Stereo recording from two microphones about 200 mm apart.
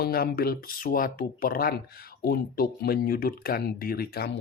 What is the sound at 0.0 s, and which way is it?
Speech, 50° left (ahead or behind).